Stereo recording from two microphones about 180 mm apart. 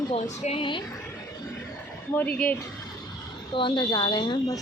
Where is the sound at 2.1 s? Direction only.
10° left (ahead or behind).